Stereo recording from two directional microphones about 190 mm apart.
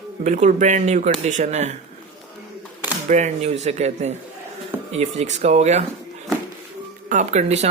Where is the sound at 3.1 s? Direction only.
35° right (ahead or behind).